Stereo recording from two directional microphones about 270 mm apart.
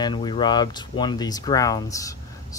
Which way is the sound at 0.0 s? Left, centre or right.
Centre.